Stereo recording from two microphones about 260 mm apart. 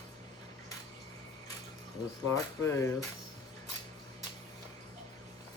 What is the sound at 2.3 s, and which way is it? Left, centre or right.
Speech, centre.